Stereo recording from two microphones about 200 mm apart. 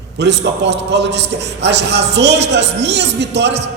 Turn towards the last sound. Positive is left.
turn(degrees=-60)  # may be behind; listen again after turning